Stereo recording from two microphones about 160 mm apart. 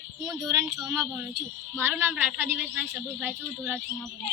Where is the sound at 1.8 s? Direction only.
10° right (ahead or behind).